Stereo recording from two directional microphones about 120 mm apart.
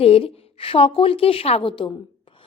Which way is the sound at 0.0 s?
50° left (ahead or behind).